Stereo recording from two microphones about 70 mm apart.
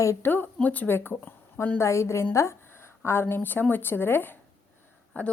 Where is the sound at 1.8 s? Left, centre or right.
Left.